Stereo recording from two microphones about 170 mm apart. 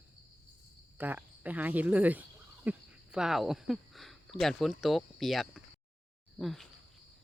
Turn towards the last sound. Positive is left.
turn(degrees=0)  # may be behind; listen again after turning